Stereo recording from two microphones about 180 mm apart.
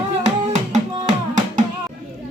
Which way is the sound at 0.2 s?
40° right (ahead or behind).